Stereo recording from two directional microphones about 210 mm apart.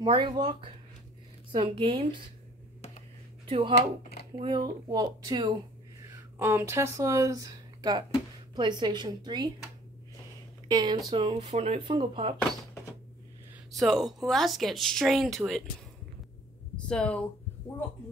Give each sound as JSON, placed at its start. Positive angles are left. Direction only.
{"t": 0.0, "sound": "speech", "side_deg": -25}
{"t": 3.4, "sound": "speech", "side_deg": -25}
{"t": 10.7, "sound": "speech", "side_deg": -20}
{"t": 13.7, "sound": "speech", "side_deg": 0}
{"t": 16.7, "sound": "speech", "side_deg": 5}